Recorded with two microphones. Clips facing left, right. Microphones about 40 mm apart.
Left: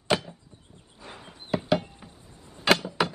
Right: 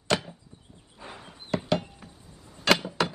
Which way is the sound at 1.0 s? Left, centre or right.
Right.